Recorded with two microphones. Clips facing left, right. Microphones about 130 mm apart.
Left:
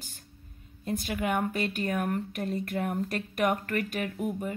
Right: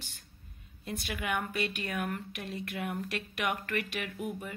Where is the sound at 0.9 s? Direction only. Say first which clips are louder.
Left 5 dB; 30° left (ahead or behind).